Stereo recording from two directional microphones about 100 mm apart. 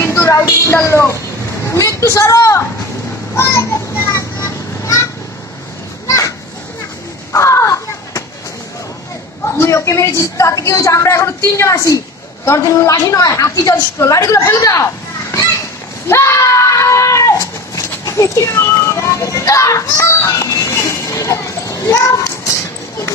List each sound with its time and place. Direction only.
0.0 s a woman's voice: 30° left (ahead or behind)
3.3 s children playing: 25° left (ahead or behind)
6.0 s children playing: 30° left (ahead or behind)
7.3 s a sound: 30° left (ahead or behind)
9.4 s a woman's voice: 30° left (ahead or behind)
16.1 s screaming: 30° left (ahead or behind)